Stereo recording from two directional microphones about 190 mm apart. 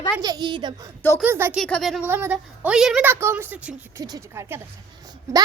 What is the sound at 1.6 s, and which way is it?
Speech, 5° left (ahead or behind).